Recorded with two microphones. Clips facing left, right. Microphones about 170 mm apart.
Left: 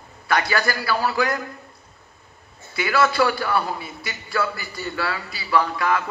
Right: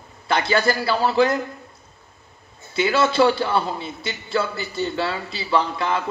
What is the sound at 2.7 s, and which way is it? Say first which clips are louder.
A man's voice: right 2 dB; 25° right (ahead or behind).